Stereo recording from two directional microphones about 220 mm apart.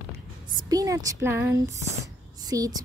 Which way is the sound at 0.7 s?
15° right (ahead or behind).